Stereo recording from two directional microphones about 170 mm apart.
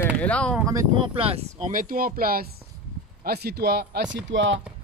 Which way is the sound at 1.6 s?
50° right (ahead or behind).